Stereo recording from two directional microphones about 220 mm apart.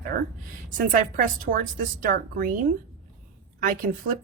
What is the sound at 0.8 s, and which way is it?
Speech, 40° right (ahead or behind).